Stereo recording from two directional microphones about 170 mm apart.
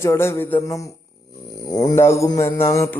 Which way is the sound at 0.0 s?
15° left (ahead or behind).